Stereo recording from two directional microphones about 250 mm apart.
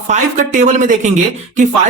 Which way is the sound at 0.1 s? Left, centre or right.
Right.